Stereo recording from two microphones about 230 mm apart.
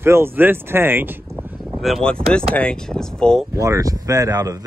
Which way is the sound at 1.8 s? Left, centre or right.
Centre.